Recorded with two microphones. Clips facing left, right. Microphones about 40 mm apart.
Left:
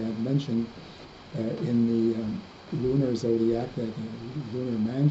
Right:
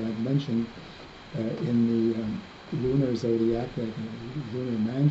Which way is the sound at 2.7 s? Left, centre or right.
Right.